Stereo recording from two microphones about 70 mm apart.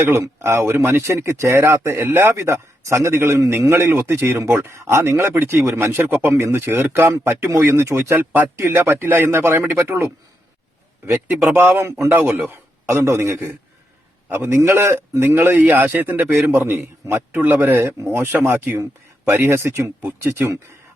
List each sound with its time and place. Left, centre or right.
0.1 s speech: right
7.9 s speech: right
8.1 s speech: right
11.4 s speech: right
12.9 s speech: right